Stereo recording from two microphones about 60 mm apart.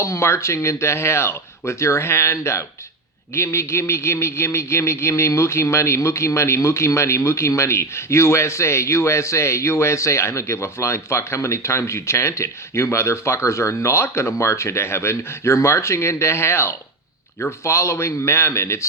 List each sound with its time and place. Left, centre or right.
0.0 s speech: left